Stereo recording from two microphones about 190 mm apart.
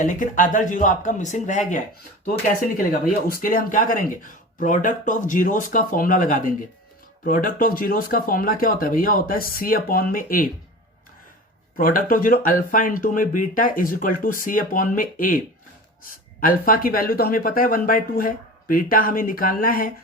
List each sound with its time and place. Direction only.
0.0 s speech: 45° left (ahead or behind)
11.8 s speech: 45° left (ahead or behind)